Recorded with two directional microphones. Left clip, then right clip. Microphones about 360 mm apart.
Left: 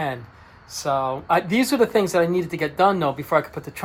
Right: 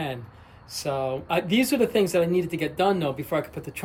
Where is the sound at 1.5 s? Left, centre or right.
Centre.